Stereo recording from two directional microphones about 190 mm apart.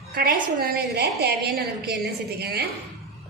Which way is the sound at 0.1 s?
50° right (ahead or behind).